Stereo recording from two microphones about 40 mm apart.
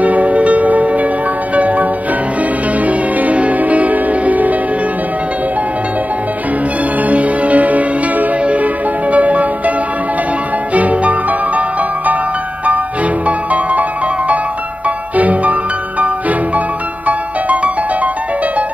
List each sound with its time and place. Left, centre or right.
0.0 s music: right
3.2 s change ringing: right
7.1 s music: right
10.7 s music: right
15.1 s music: right